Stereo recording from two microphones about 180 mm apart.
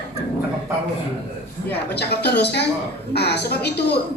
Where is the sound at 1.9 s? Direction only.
65° left (ahead or behind).